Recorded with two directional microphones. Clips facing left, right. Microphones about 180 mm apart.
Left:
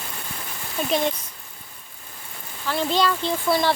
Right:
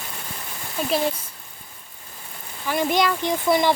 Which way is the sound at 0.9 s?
5° right (ahead or behind).